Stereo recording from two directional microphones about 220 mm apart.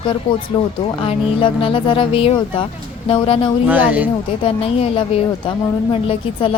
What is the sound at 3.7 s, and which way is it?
Speech, 5° right (ahead or behind).